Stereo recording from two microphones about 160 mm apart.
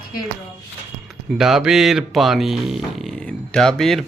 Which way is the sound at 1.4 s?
5° right (ahead or behind).